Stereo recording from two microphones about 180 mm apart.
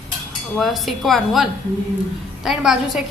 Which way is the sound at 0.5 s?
Centre (ahead or behind).